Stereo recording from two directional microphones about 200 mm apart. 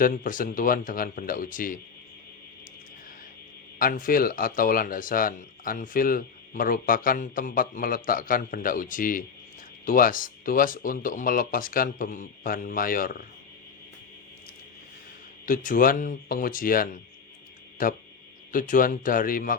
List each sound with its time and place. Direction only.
0.0 s speech: 40° left (ahead or behind)
3.8 s speech: 45° left (ahead or behind)
15.4 s speech: 45° left (ahead or behind)